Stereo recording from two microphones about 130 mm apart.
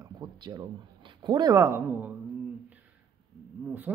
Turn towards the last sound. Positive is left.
turn(degrees=-15)  # may be behind; listen again after turning